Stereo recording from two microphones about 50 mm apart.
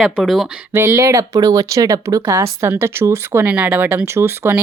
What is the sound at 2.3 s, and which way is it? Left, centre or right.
Speech, right.